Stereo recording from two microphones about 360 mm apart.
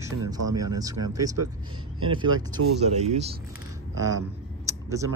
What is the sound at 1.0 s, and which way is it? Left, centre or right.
Speech, centre.